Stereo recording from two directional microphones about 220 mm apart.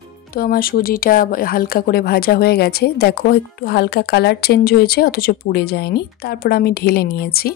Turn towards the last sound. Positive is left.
turn(degrees=45)  # may be behind; listen again after turning